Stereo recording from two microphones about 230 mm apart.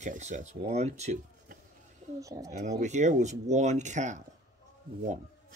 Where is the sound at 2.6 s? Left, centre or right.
Right.